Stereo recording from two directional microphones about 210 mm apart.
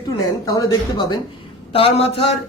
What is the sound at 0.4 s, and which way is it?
A man's voice, 15° left (ahead or behind).